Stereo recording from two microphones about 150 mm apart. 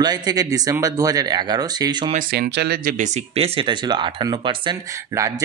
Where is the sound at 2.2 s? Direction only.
90° right.